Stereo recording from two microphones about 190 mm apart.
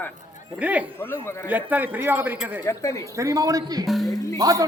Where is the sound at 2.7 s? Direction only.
15° left (ahead or behind).